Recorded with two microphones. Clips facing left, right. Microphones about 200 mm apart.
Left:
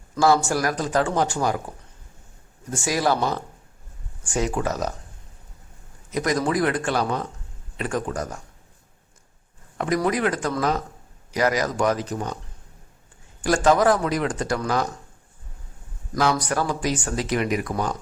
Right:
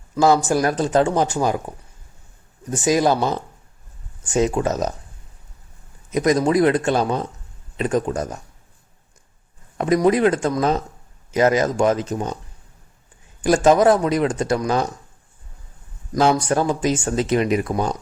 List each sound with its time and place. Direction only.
0.2 s speech: 20° right (ahead or behind)
2.6 s speech: 20° right (ahead or behind)
6.1 s speech: 20° right (ahead or behind)
9.7 s speech: 20° right (ahead or behind)
13.4 s speech: 20° right (ahead or behind)
16.1 s speech: 25° right (ahead or behind)